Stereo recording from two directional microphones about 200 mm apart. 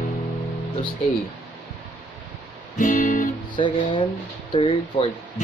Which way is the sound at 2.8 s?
40° left (ahead or behind).